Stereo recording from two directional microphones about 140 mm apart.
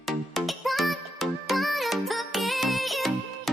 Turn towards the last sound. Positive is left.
turn(degrees=0)  # may be behind; listen again after turning